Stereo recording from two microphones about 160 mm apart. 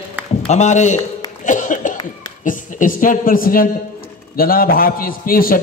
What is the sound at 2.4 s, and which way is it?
A man's voice, 55° left (ahead or behind).